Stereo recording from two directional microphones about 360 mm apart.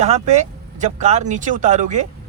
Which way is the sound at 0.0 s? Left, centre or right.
Centre.